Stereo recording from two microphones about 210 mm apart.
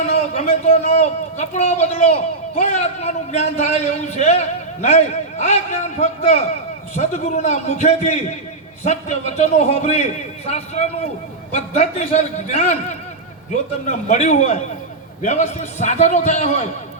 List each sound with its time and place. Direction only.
0.0 s a man's voice: 30° left (ahead or behind)